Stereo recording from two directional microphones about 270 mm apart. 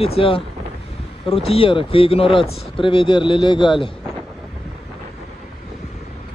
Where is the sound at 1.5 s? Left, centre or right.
Centre.